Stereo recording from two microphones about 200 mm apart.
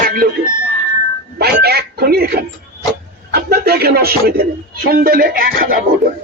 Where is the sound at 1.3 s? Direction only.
50° right (ahead or behind).